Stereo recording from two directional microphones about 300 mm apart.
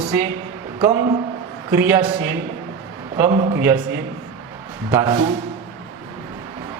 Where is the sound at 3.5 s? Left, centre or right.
Centre.